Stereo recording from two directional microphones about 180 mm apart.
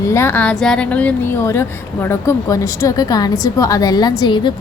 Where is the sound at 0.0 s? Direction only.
15° left (ahead or behind).